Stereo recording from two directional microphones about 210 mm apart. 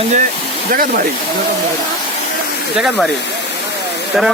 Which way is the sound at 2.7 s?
Centre (ahead or behind).